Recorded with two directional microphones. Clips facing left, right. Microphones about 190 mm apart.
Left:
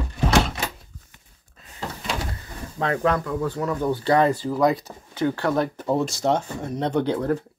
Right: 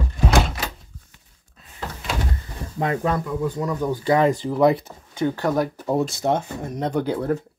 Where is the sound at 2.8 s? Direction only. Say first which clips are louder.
Even; 15° right (ahead or behind).